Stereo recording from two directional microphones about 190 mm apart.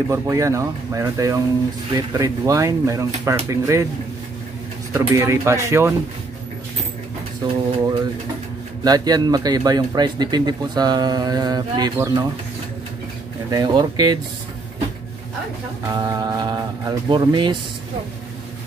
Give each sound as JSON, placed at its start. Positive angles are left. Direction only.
{"t": 0.1, "sound": "speech", "side_deg": -15}
{"t": 4.9, "sound": "speech", "side_deg": -15}
{"t": 7.4, "sound": "speech", "side_deg": -25}
{"t": 13.5, "sound": "speech", "side_deg": -20}
{"t": 15.9, "sound": "speech", "side_deg": -20}